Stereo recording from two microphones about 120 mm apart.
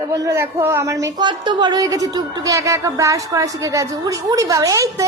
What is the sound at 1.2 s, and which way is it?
A woman's voice, 40° right (ahead or behind).